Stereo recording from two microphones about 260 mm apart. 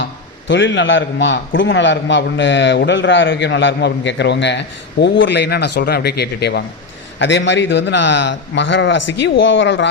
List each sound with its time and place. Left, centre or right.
0.0 s a man's voice: left